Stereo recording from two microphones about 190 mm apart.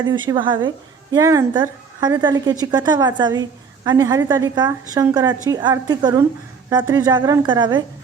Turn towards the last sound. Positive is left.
turn(degrees=-25)  # may be behind; listen again after turning